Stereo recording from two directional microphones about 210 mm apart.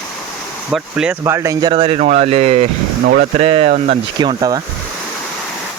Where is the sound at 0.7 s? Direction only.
5° right (ahead or behind); by 4.6 s 20° right (ahead or behind).